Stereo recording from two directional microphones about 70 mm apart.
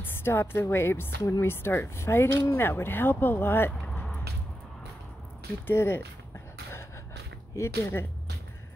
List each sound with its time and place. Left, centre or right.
0.0 s a woman's voice: left
3.8 s a sound: left
5.7 s speech: left
7.5 s speech: left